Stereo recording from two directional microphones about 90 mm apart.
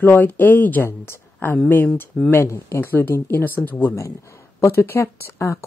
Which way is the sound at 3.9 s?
35° left (ahead or behind).